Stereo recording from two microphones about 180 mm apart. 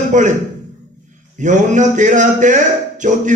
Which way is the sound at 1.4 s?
45° right (ahead or behind).